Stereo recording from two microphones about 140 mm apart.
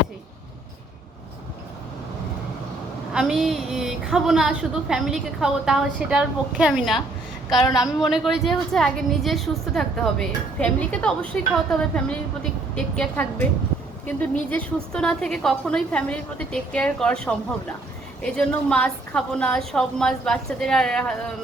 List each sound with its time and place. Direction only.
3.1 s a woman's voice: 5° right (ahead or behind)
7.7 s a woman's voice: 25° left (ahead or behind)
8.0 s a woman's voice: centre (ahead or behind)